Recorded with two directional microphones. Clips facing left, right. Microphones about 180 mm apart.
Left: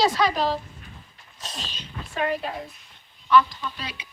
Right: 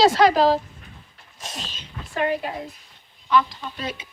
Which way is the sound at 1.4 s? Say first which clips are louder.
Right 1 dB; 5° right (ahead or behind).